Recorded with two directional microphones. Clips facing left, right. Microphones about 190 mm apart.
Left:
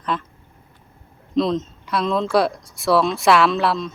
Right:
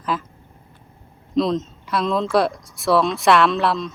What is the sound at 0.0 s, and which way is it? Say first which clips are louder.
Speech: even; 5° right (ahead or behind).